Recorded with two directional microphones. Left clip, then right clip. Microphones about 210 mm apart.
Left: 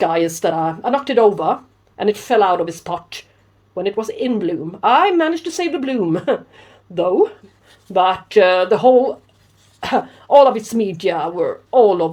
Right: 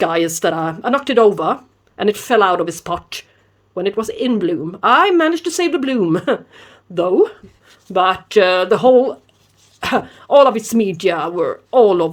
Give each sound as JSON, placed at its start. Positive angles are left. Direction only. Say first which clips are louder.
{"t": 0.0, "sound": "speech", "louder": "even", "side_deg": -30}